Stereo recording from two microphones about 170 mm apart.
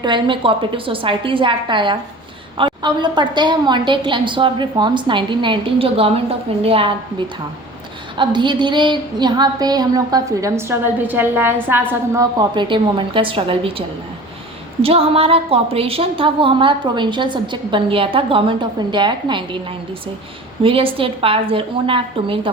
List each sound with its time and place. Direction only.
0.0 s a woman's voice: 30° right (ahead or behind)
8.1 s a woman's voice: 30° right (ahead or behind)
20.6 s a woman's voice: 30° right (ahead or behind)